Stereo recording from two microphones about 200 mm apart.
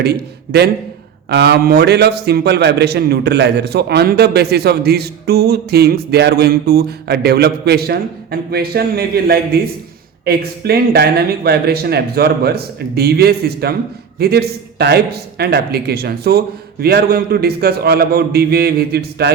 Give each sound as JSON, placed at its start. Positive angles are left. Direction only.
{"t": 0.0, "sound": "a man's voice", "side_deg": -55}